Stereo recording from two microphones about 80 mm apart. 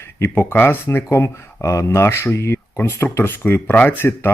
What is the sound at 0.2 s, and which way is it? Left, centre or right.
A man's voice, left.